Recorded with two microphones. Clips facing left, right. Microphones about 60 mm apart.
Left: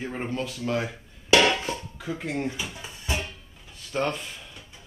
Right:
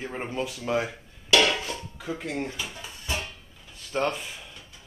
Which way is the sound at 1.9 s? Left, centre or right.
Centre.